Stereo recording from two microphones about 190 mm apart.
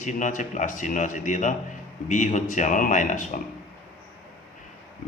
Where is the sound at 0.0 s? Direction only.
40° left (ahead or behind).